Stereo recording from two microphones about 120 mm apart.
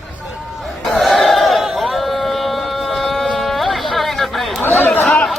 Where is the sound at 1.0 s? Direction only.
Centre (ahead or behind).